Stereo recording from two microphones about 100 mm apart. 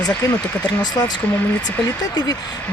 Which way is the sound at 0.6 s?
45° left (ahead or behind).